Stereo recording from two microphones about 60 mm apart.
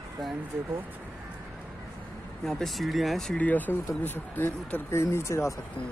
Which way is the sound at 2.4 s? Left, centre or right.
Centre.